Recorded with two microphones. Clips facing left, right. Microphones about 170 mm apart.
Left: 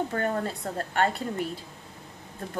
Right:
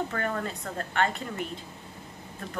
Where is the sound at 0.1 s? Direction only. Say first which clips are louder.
Left 3 dB; 30° left (ahead or behind).